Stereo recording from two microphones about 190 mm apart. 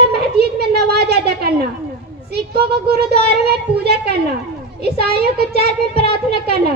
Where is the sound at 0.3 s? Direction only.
55° right (ahead or behind).